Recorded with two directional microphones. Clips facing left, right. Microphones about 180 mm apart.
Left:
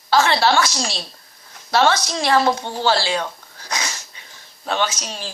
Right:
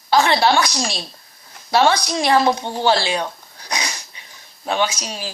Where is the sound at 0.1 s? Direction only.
15° right (ahead or behind).